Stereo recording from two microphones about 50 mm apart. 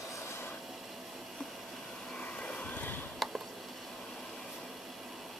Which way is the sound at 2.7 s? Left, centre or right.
Left.